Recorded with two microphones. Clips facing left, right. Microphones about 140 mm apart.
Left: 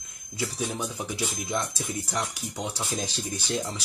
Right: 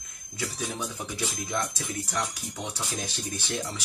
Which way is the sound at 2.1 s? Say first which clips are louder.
Left 1 dB; 25° left (ahead or behind).